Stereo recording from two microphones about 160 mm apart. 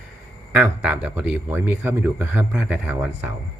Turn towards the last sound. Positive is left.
turn(degrees=-10)  # may be behind; listen again after turning